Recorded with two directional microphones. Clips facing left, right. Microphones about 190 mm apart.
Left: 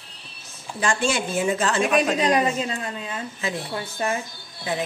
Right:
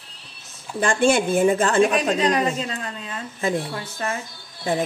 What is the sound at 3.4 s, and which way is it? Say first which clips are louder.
Speech: right 6 dB; 50° right (ahead or behind).